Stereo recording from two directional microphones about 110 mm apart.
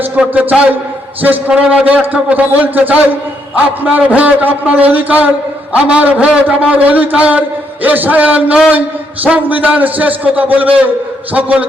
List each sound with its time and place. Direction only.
0.2 s a man's voice: 10° right (ahead or behind)